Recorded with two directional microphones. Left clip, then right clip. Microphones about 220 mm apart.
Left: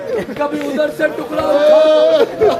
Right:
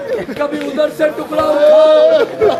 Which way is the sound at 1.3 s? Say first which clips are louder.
Right 1 dB; 35° left (ahead or behind).